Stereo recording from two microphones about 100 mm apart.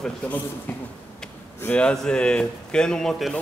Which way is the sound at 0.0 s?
15° left (ahead or behind).